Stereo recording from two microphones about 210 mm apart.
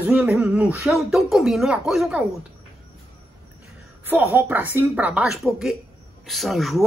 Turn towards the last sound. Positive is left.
turn(degrees=0)  # may be behind; listen again after turning